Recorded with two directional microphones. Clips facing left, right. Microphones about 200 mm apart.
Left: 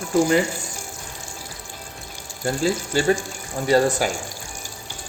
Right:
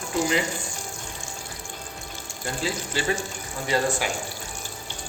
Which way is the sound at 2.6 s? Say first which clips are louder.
Left 7 dB; 45° left (ahead or behind).